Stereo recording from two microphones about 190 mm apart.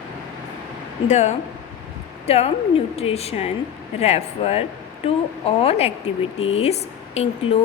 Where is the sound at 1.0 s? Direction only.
35° left (ahead or behind).